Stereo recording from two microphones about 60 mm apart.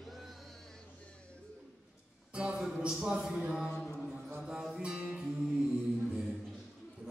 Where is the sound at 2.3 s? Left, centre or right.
Centre.